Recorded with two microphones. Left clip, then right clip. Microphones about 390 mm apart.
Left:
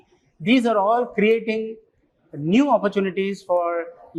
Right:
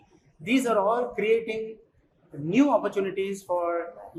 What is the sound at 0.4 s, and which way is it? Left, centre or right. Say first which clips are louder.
Speech: left 5 dB; left.